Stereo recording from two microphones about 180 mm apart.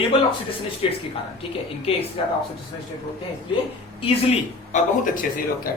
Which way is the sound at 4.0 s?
40° left (ahead or behind).